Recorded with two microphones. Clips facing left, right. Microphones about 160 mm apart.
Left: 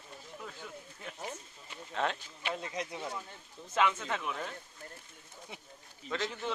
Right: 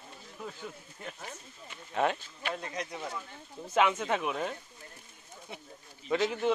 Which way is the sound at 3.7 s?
15° right (ahead or behind).